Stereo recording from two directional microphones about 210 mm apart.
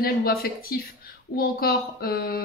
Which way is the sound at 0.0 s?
45° left (ahead or behind).